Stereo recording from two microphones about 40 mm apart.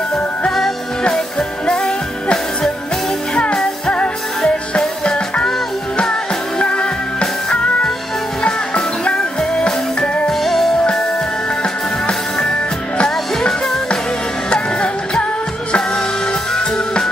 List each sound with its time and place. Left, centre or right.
1.0 s music: centre
3.5 s music: centre
3.9 s music: left
6.7 s music: left
10.2 s music: centre
11.6 s music: left
16.5 s music: centre